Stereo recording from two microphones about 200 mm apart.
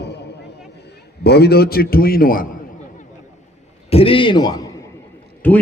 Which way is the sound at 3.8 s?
30° left (ahead or behind).